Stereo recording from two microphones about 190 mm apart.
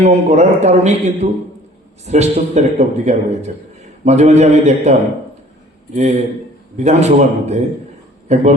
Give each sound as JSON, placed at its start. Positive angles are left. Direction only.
{"t": 0.0, "sound": "speech", "side_deg": -35}